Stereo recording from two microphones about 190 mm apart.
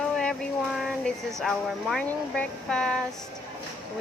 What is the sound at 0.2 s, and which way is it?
Speech, centre (ahead or behind).